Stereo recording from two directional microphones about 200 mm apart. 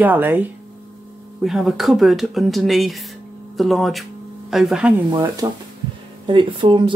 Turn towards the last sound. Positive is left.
turn(degrees=-25)  # may be behind; listen again after turning